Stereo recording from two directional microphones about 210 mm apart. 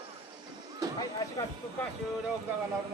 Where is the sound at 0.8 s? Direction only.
15° right (ahead or behind).